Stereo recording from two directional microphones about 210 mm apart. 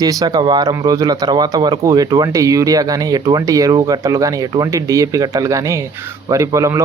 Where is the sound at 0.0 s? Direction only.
15° right (ahead or behind).